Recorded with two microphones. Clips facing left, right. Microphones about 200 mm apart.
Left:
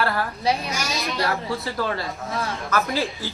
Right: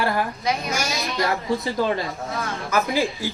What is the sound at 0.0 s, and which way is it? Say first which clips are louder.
A child's voice: even; 15° right (ahead or behind).